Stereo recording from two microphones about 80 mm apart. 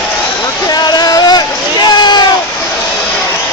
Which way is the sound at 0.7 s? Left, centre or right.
Left.